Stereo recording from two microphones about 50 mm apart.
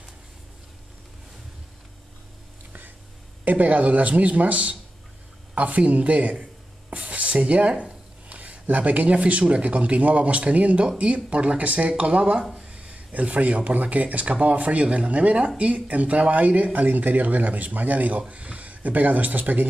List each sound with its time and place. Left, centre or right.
3.4 s speech: right
6.9 s a sound: right
7.4 s speech: right